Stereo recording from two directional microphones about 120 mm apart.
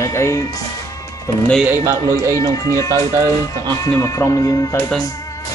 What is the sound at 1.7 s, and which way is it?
Speech, 20° right (ahead or behind).